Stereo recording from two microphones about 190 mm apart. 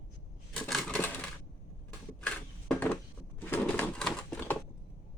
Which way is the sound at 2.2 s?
5° left (ahead or behind).